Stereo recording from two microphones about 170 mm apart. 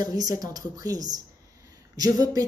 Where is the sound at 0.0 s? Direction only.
20° right (ahead or behind).